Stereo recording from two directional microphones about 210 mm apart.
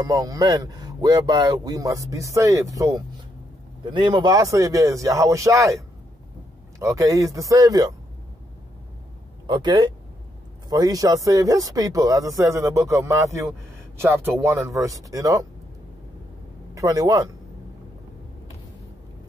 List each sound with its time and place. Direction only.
0.0 s speech: 15° right (ahead or behind)
9.5 s speech: 20° right (ahead or behind)
16.7 s speech: 15° right (ahead or behind)